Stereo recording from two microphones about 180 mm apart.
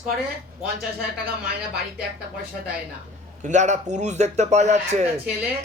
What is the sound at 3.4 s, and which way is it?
Speech, 40° right (ahead or behind).